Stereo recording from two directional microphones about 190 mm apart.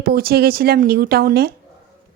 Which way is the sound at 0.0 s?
55° right (ahead or behind).